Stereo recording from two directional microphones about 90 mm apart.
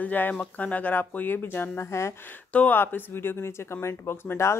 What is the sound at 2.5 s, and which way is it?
Speech, 15° left (ahead or behind).